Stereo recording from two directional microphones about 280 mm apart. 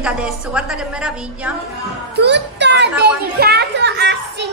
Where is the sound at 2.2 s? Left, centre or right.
Right.